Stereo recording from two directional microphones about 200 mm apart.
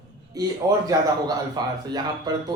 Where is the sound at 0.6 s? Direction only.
15° right (ahead or behind).